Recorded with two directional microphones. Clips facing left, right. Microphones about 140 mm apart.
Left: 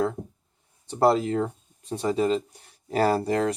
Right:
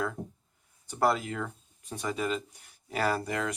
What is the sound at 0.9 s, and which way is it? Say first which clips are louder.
Speech: left 7 dB; 30° left (ahead or behind).